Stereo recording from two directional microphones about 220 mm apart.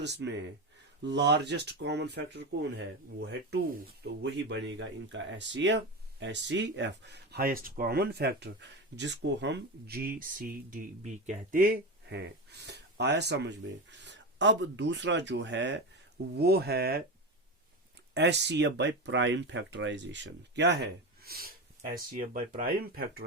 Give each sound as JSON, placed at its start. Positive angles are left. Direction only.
{"t": 0.0, "sound": "speech", "side_deg": -50}
{"t": 18.1, "sound": "speech", "side_deg": -50}